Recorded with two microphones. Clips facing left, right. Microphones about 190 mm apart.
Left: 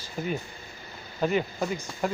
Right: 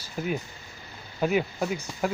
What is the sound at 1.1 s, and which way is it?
A man's voice, 5° right (ahead or behind).